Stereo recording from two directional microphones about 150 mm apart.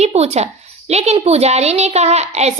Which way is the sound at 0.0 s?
45° right (ahead or behind).